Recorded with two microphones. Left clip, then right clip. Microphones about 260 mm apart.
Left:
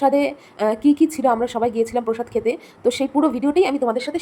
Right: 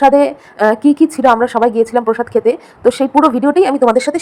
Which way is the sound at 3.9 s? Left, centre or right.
Right.